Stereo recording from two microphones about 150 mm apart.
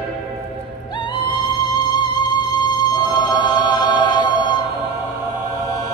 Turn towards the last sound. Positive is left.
turn(degrees=30)  # may be behind; listen again after turning